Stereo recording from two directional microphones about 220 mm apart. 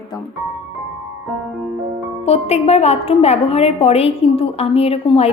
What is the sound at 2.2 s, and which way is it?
A woman's voice, 30° left (ahead or behind).